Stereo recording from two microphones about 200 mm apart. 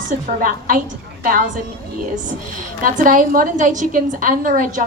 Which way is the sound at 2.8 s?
40° right (ahead or behind).